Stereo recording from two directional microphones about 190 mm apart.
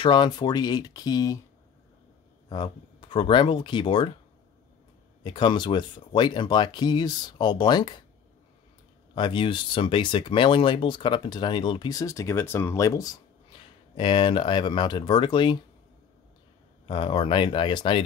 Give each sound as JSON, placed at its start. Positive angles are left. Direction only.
{"t": 0.0, "sound": "speech", "side_deg": 25}
{"t": 2.5, "sound": "speech", "side_deg": 25}
{"t": 5.2, "sound": "speech", "side_deg": 25}
{"t": 9.1, "sound": "speech", "side_deg": 25}
{"t": 16.8, "sound": "speech", "side_deg": 25}